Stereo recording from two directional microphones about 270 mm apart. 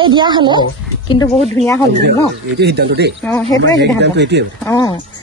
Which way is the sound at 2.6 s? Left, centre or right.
Right.